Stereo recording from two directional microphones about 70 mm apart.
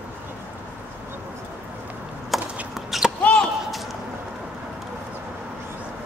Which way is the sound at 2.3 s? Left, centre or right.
Centre.